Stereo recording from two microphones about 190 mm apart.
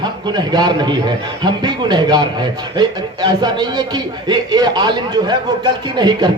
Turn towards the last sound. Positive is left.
turn(degrees=-20)  # may be behind; listen again after turning